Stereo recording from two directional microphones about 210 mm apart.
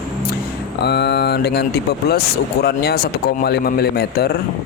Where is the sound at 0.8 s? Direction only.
50° left (ahead or behind).